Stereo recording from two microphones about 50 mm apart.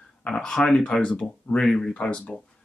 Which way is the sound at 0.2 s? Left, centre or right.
Centre.